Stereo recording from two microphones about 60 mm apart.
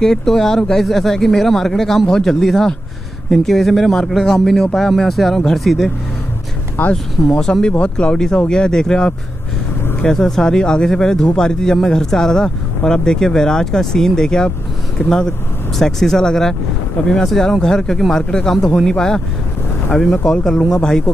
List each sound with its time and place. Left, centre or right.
0.0 s speech: centre
6.8 s speech: left
7.2 s speech: centre